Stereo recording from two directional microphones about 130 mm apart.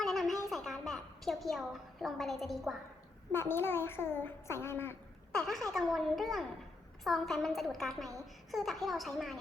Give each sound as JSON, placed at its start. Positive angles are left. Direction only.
{"t": 0.0, "sound": "a sound", "side_deg": 0}
{"t": 0.5, "sound": "a woman's voice", "side_deg": 0}
{"t": 3.3, "sound": "a child's voice", "side_deg": 20}
{"t": 5.3, "sound": "a child's voice", "side_deg": 5}